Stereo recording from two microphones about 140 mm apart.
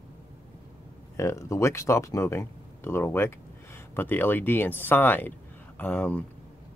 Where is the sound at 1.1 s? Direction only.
20° left (ahead or behind).